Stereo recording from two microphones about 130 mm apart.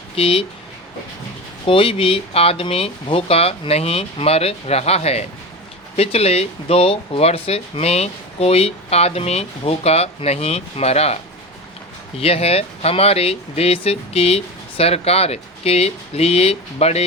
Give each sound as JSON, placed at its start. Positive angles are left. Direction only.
{"t": 0.2, "sound": "speech", "side_deg": 45}
{"t": 1.6, "sound": "speech", "side_deg": 45}